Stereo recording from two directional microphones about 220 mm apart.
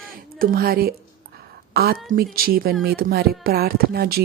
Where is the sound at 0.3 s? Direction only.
40° right (ahead or behind).